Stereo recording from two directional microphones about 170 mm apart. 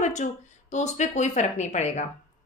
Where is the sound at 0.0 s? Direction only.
45° left (ahead or behind).